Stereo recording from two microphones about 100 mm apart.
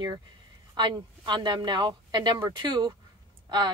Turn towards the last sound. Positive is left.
turn(degrees=-45)  # may be behind; listen again after turning